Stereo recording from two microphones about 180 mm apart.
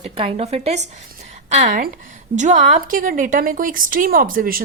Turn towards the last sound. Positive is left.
turn(degrees=-50)  # may be behind; listen again after turning